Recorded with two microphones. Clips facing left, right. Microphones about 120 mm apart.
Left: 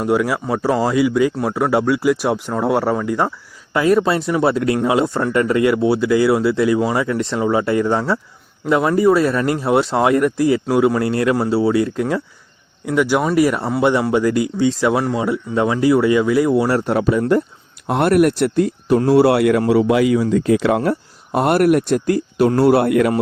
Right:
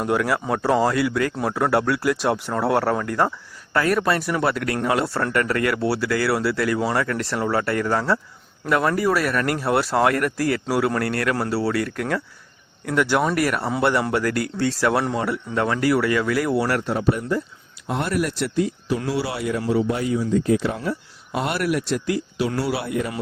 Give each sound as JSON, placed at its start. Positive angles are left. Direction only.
{"t": 0.0, "sound": "speech", "side_deg": 5}
{"t": 16.8, "sound": "speech", "side_deg": 70}
{"t": 21.3, "sound": "speech", "side_deg": 50}